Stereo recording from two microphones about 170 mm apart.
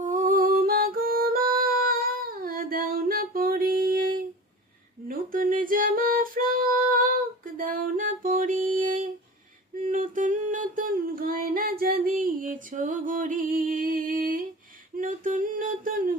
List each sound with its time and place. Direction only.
0.0 s music: 50° right (ahead or behind)
5.0 s female singing: 55° right (ahead or behind)
9.8 s a sound: 50° right (ahead or behind)